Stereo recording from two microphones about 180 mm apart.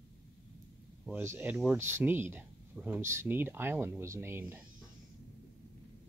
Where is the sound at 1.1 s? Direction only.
10° right (ahead or behind).